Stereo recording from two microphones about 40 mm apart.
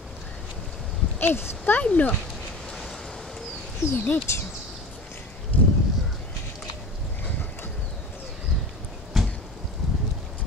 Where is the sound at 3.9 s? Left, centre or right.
Left.